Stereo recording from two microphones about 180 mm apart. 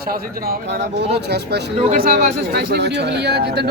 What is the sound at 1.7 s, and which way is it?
Speech, 40° right (ahead or behind).